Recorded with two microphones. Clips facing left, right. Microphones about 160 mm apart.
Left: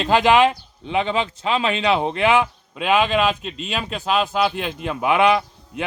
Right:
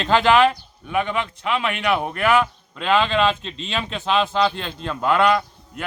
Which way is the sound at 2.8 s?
10° left (ahead or behind).